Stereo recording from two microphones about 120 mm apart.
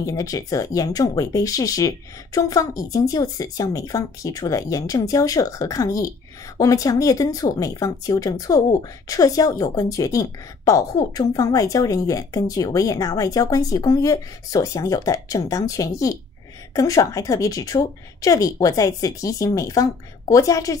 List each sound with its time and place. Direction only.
0.0 s a woman's voice: 30° left (ahead or behind)